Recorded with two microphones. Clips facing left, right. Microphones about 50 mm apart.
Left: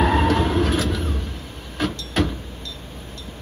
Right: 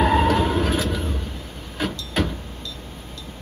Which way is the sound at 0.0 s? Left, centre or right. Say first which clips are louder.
Right 1 dB; centre.